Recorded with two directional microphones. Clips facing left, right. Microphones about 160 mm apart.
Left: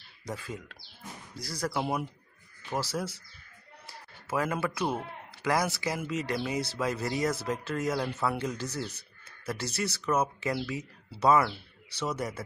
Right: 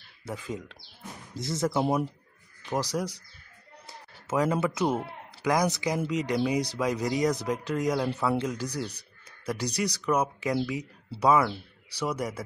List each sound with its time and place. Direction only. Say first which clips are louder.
0.4 s speech: right 4 dB; 20° right (ahead or behind)
3.8 s a sound: right 1 dB; 20° right (ahead or behind)
5.4 s speech: right 3 dB; 15° right (ahead or behind)